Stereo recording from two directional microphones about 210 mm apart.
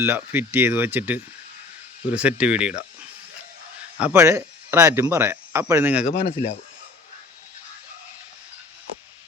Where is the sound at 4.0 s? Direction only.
10° right (ahead or behind).